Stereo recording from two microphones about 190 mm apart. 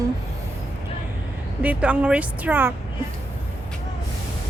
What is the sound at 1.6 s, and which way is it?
Speech, 10° right (ahead or behind).